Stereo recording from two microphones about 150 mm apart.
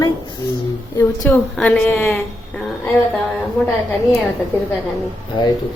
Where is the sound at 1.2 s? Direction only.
10° left (ahead or behind).